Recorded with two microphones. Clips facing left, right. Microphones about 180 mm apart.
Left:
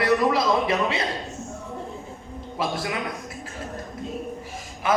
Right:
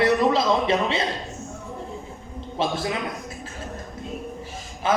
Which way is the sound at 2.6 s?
25° right (ahead or behind).